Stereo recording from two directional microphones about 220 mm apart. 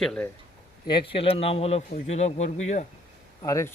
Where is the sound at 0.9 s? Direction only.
25° left (ahead or behind).